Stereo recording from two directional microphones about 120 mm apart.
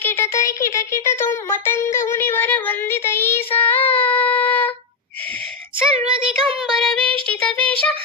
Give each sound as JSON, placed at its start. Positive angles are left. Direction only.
{"t": 0.0, "sound": "music", "side_deg": 15}
{"t": 5.9, "sound": "child singing", "side_deg": -55}
{"t": 6.6, "sound": "child singing", "side_deg": 0}